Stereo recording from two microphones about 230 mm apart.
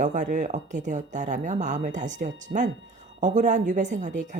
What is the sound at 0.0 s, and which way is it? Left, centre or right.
A woman's voice, right.